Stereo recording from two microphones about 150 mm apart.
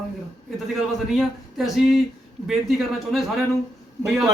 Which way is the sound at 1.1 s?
Centre (ahead or behind).